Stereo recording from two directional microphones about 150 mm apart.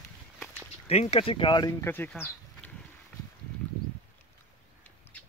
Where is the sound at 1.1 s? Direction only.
35° left (ahead or behind).